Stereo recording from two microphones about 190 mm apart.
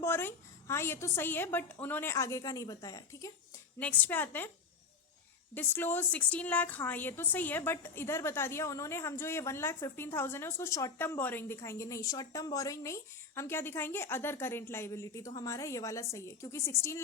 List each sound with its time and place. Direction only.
0.0 s a woman's voice: 10° left (ahead or behind)
5.5 s a woman's voice: 10° left (ahead or behind)